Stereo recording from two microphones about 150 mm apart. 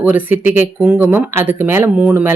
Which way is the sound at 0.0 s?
10° right (ahead or behind).